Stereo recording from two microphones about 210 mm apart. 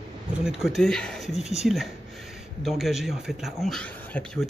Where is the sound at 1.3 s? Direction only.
30° left (ahead or behind).